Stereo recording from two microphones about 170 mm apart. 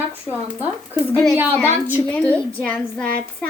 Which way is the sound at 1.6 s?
10° right (ahead or behind).